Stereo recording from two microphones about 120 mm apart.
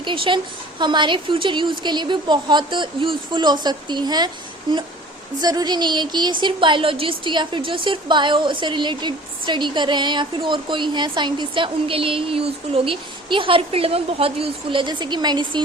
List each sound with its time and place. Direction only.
0.0 s a woman's voice: 45° right (ahead or behind)
5.4 s speech: 35° right (ahead or behind)